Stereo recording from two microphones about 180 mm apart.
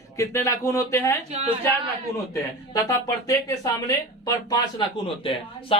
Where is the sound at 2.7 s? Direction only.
15° left (ahead or behind).